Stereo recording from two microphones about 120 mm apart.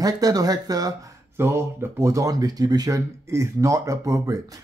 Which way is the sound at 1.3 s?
20° right (ahead or behind).